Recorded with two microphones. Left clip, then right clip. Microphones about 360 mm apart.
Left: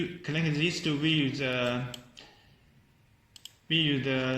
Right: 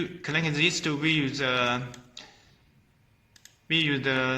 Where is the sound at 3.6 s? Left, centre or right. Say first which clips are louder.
Right 3 dB; right.